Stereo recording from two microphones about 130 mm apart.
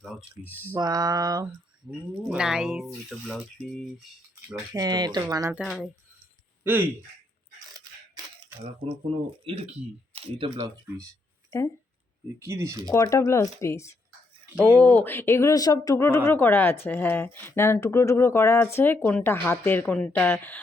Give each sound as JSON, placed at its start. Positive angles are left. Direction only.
{"t": 0.0, "sound": "a sound", "side_deg": 0}
{"t": 0.4, "sound": "speech", "side_deg": -15}
{"t": 0.8, "sound": "speech", "side_deg": -30}
{"t": 2.3, "sound": "speech", "side_deg": -5}
{"t": 4.5, "sound": "speech", "side_deg": -30}
{"t": 5.6, "sound": "speech", "side_deg": 0}
{"t": 8.6, "sound": "speech", "side_deg": -50}
{"t": 11.5, "sound": "speech", "side_deg": 20}
{"t": 12.4, "sound": "speech", "side_deg": -20}
{"t": 12.8, "sound": "speech", "side_deg": 25}